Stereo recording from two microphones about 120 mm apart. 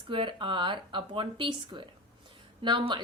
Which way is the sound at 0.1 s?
45° right (ahead or behind).